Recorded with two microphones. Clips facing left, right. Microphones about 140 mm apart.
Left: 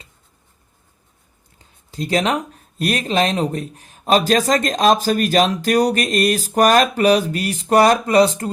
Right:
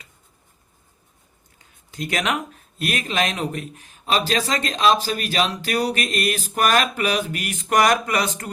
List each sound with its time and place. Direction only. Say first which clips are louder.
1.5 s speech: left 4 dB; 30° left (ahead or behind)